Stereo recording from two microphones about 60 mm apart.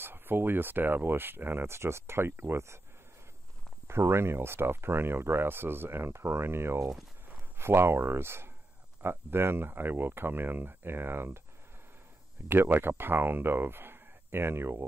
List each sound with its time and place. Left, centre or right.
0.0 s speech: right
3.8 s speech: right
12.4 s speech: right